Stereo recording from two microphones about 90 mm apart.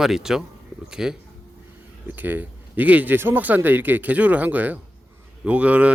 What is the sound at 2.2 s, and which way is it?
Speech, 20° right (ahead or behind).